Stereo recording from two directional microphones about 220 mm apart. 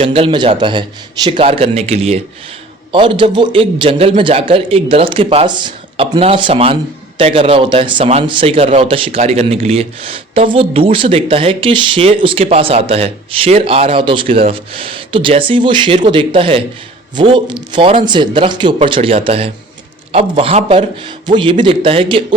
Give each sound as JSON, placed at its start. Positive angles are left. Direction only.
{"t": 0.0, "sound": "speech", "side_deg": -25}